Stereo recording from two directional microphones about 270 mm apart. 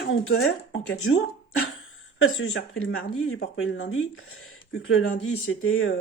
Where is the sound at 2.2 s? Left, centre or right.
Left.